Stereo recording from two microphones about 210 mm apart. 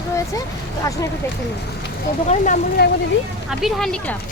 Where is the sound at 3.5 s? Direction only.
Centre (ahead or behind).